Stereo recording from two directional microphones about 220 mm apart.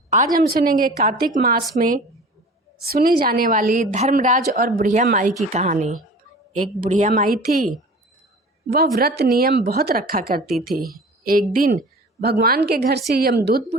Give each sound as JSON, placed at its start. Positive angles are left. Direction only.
{"t": 0.3, "sound": "a woman's voice", "side_deg": -40}
{"t": 2.9, "sound": "a woman's voice", "side_deg": -40}